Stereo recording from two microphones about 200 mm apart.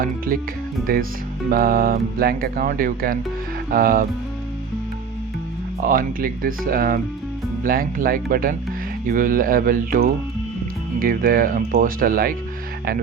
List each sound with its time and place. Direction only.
0.3 s speech: 40° right (ahead or behind)
5.8 s speech: 45° right (ahead or behind)